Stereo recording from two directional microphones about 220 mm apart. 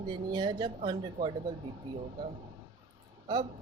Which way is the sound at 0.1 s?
20° right (ahead or behind).